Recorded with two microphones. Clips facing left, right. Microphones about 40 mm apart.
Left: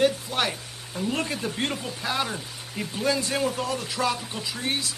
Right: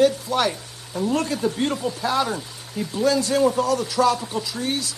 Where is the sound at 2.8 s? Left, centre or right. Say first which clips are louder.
Right 5 dB; left.